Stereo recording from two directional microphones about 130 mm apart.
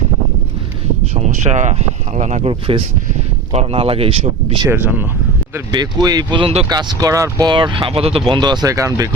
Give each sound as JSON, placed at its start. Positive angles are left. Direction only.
{"t": 1.1, "sound": "speech", "side_deg": -60}
{"t": 4.7, "sound": "speech", "side_deg": -15}
{"t": 5.7, "sound": "speech", "side_deg": -30}
{"t": 7.5, "sound": "speech", "side_deg": -40}
{"t": 8.3, "sound": "speech", "side_deg": -35}